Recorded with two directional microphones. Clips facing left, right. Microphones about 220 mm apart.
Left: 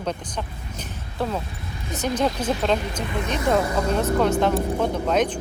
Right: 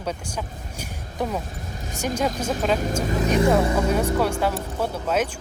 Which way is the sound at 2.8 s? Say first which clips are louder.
Right 4 dB; 45° right (ahead or behind).